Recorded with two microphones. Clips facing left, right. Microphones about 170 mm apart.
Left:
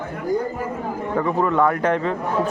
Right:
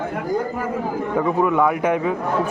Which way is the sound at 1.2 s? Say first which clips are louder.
Right 1 dB; 10° right (ahead or behind).